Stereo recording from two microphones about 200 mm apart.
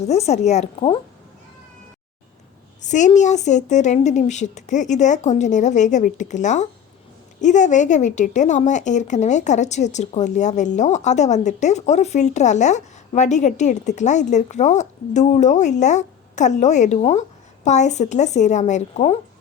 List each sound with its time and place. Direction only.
0.1 s a woman's voice: 35° left (ahead or behind)
2.8 s a woman's voice: 40° left (ahead or behind)